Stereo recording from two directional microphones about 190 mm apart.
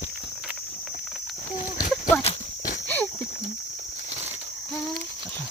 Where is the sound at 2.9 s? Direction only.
10° left (ahead or behind).